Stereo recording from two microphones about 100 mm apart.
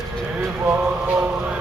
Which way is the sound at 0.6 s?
20° right (ahead or behind).